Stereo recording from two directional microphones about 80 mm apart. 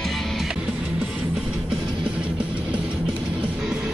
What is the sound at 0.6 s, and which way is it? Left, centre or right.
Music, centre.